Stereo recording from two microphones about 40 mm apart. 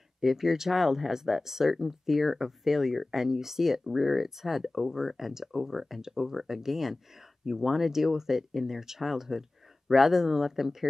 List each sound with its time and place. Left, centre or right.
0.2 s speech: centre